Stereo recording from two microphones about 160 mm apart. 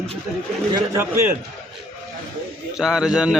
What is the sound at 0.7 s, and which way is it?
Speech, 20° right (ahead or behind).